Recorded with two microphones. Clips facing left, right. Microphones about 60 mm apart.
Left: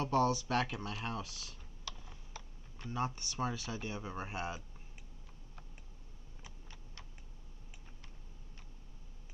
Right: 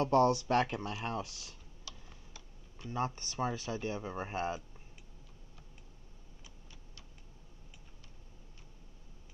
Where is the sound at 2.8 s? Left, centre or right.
Left.